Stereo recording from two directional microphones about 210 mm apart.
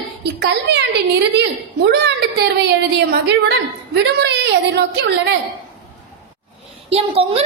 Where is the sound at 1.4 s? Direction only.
55° right (ahead or behind).